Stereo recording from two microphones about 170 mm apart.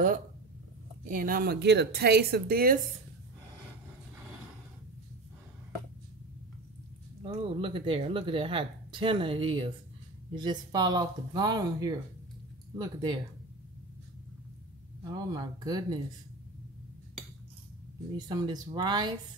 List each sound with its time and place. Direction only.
1.0 s speech: 55° right (ahead or behind)
7.2 s a woman's voice: 30° right (ahead or behind)
15.0 s speech: 25° right (ahead or behind)
18.1 s speech: 25° right (ahead or behind)